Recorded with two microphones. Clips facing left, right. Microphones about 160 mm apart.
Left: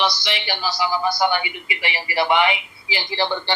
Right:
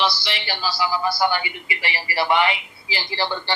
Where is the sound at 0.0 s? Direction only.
20° left (ahead or behind).